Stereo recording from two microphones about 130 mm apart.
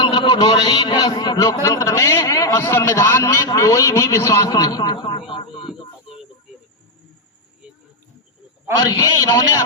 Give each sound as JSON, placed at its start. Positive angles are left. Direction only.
{"t": 0.0, "sound": "a man's voice", "side_deg": 35}
{"t": 8.8, "sound": "a man's voice", "side_deg": 30}